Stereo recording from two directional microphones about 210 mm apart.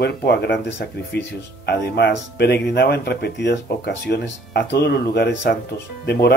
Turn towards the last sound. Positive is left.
turn(degrees=50)  # may be behind; listen again after turning